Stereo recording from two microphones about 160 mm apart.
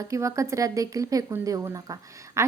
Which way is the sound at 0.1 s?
20° right (ahead or behind).